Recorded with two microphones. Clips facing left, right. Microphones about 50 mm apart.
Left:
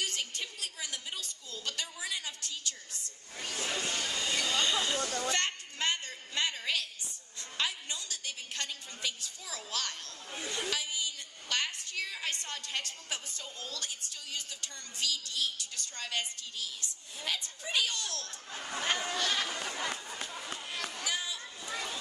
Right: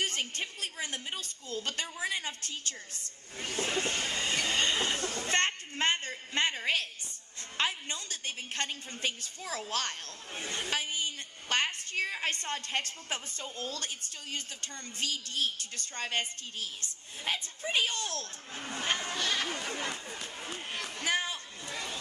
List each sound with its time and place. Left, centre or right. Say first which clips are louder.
0.0 s a woman's voice: right 3 dB; right
20.6 s run: right 2 dB; right
20.9 s a sound: right 8 dB; right